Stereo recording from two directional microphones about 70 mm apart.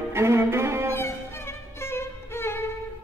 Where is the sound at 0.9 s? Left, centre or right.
Left.